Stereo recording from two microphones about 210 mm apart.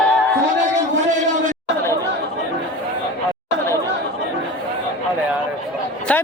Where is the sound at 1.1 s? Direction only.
35° right (ahead or behind).